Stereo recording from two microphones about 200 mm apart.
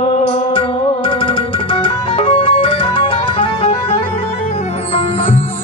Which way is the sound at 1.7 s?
25° left (ahead or behind).